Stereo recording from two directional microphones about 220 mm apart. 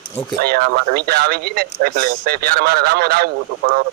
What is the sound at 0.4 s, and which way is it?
Speech, 45° right (ahead or behind).